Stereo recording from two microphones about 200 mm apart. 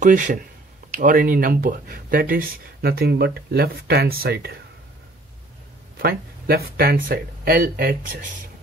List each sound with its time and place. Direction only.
0.0 s speech: 40° right (ahead or behind)
5.9 s speech: 50° right (ahead or behind)